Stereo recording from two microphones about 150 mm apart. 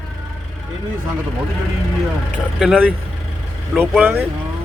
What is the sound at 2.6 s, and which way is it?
Speech, 5° right (ahead or behind).